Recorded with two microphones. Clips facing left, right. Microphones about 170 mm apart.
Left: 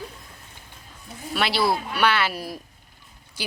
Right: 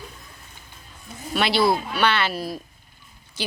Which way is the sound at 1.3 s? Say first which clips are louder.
Right 3 dB; centre (ahead or behind).